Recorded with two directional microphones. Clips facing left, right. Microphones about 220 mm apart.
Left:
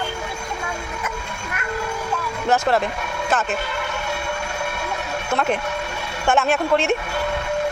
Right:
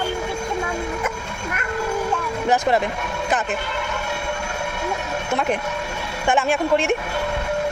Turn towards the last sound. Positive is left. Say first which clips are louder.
# even
turn(degrees=-10)  # may be behind; listen again after turning